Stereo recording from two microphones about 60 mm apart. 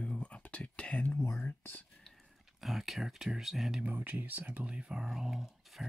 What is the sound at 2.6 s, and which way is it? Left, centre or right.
Speech, centre.